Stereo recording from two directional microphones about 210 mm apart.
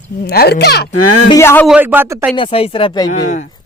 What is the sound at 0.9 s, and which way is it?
Speech, 90° left.